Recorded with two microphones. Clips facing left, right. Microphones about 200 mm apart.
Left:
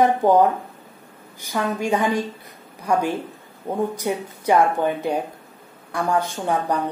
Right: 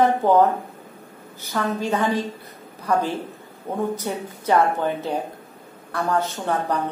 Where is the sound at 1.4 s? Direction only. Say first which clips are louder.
Left 1 dB; 15° left (ahead or behind).